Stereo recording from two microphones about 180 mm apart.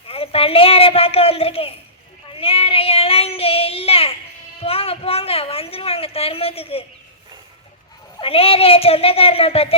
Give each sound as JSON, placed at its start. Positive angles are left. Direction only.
{"t": 0.1, "sound": "a woman's voice", "side_deg": 30}
{"t": 2.3, "sound": "child singing", "side_deg": 30}
{"t": 4.6, "sound": "a woman's voice", "side_deg": 30}
{"t": 8.2, "sound": "a woman's voice", "side_deg": 30}